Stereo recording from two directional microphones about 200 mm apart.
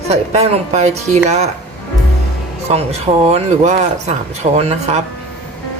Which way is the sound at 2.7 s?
30° right (ahead or behind).